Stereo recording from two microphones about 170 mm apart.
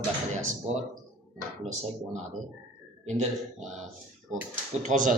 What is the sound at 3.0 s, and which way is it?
Speech, 40° right (ahead or behind).